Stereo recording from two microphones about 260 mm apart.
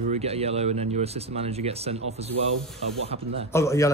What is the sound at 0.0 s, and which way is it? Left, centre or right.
Speech, right.